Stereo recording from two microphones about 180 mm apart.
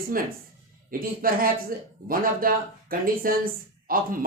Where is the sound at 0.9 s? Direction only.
55° right (ahead or behind).